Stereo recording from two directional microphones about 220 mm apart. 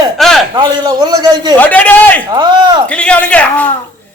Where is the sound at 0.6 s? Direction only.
20° right (ahead or behind).